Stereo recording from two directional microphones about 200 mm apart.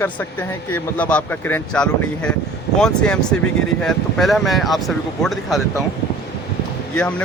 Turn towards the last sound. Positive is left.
turn(degrees=5)  # may be behind; listen again after turning